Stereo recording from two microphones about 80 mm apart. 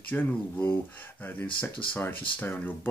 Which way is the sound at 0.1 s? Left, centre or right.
Left.